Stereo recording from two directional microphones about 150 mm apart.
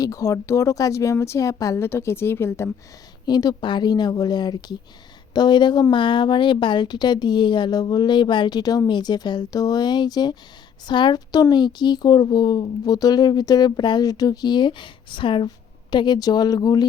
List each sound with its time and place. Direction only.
0.0 s speech: 20° left (ahead or behind)
3.2 s speech: 30° left (ahead or behind)